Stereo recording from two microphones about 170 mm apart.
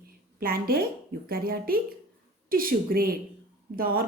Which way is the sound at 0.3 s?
60° right (ahead or behind).